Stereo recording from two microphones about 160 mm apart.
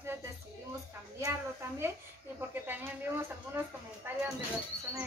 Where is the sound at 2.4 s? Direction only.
15° right (ahead or behind).